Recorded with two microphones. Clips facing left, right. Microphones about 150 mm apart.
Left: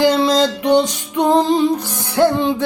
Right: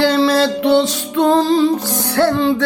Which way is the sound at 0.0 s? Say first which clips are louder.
Even; 15° left (ahead or behind).